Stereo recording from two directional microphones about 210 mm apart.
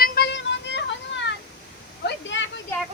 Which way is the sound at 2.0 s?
55° left (ahead or behind).